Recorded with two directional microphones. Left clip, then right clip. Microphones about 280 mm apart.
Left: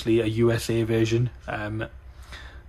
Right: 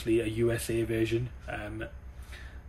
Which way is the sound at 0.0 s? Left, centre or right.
Centre.